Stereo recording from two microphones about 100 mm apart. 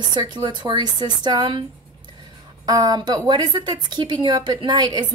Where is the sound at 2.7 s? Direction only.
40° right (ahead or behind).